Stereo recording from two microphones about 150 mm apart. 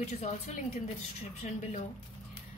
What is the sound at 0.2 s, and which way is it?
A woman's voice, 45° left (ahead or behind).